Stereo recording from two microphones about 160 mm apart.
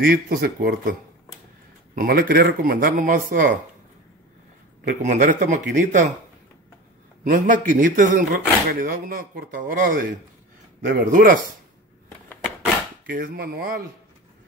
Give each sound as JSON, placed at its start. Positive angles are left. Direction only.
{"t": 0.0, "sound": "speech", "side_deg": -70}
{"t": 2.0, "sound": "speech", "side_deg": -65}
{"t": 4.8, "sound": "speech", "side_deg": -55}
{"t": 7.2, "sound": "speech", "side_deg": -55}
{"t": 13.0, "sound": "speech", "side_deg": -70}